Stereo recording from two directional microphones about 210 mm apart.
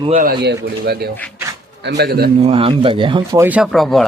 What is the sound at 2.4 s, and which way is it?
Speech, 30° right (ahead or behind).